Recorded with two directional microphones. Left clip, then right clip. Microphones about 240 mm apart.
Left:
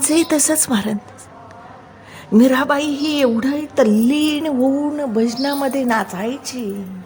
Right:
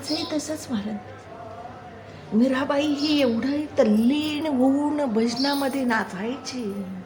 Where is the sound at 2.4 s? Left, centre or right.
Left.